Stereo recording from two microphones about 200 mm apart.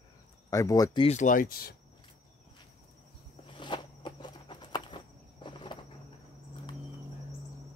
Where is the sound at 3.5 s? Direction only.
25° left (ahead or behind).